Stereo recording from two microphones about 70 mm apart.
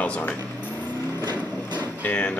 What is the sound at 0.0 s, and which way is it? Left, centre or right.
Speech, centre.